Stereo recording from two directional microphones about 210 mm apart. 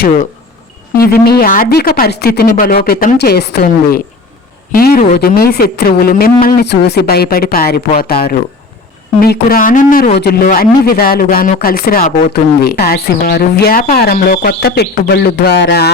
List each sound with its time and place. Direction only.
0.9 s speech: 45° left (ahead or behind)